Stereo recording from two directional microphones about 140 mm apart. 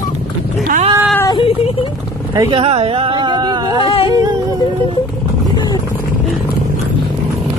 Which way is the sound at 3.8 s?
40° left (ahead or behind).